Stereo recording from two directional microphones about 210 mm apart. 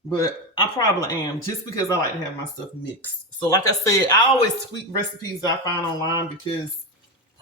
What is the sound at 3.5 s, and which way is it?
Speech, 15° left (ahead or behind).